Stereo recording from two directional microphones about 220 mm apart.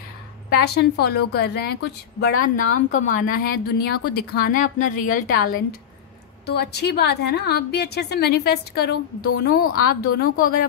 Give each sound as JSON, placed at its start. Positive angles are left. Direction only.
{"t": 0.6, "sound": "a woman's voice", "side_deg": 45}